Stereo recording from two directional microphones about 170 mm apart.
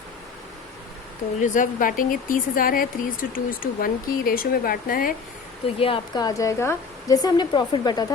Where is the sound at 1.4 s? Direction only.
50° left (ahead or behind).